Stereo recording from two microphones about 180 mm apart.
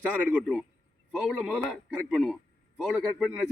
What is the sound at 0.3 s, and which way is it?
Speech, 5° right (ahead or behind).